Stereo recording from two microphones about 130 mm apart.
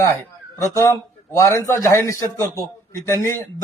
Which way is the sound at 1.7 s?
25° left (ahead or behind).